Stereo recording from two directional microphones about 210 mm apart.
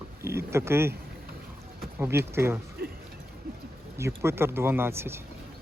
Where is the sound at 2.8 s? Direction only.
50° right (ahead or behind).